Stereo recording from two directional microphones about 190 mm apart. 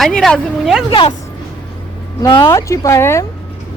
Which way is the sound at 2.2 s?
20° left (ahead or behind).